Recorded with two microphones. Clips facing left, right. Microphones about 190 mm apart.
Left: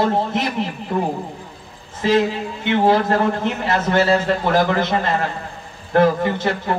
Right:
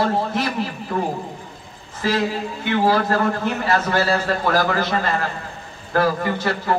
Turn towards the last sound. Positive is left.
turn(degrees=20)  # may be behind; listen again after turning